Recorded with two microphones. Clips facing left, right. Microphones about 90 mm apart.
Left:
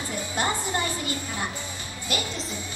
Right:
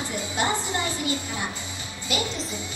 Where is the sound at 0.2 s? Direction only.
20° right (ahead or behind).